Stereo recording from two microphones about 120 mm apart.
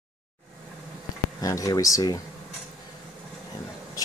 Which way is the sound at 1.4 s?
30° left (ahead or behind).